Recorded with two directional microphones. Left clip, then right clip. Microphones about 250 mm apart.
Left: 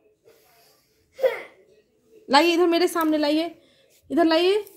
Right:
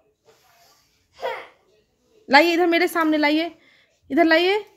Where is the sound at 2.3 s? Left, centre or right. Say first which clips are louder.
Right 2 dB; centre.